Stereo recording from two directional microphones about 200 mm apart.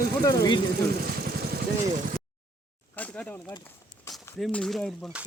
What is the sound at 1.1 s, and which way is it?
Vehicle, 50° right (ahead or behind).